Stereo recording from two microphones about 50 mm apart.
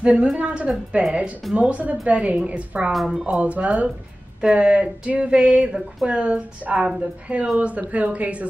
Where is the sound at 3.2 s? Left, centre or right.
Right.